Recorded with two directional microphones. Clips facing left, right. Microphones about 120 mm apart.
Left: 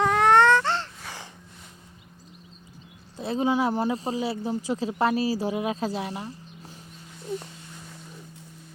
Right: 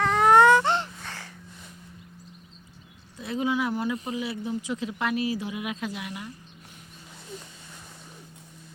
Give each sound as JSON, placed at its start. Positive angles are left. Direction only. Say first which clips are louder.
{"t": 0.2, "sound": "baby cry", "louder": "right 2 dB", "side_deg": -5}
{"t": 1.0, "sound": "gasp", "louder": "left 1 dB", "side_deg": 15}
{"t": 3.2, "sound": "speech", "louder": "left 3 dB", "side_deg": 30}